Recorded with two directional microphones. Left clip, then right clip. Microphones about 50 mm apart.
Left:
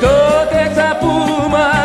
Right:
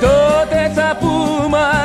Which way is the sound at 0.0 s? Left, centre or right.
Right.